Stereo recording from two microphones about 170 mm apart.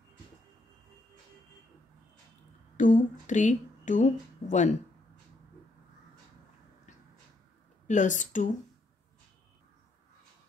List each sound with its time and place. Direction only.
2.8 s speech: 50° left (ahead or behind)
7.8 s a woman's voice: 45° left (ahead or behind)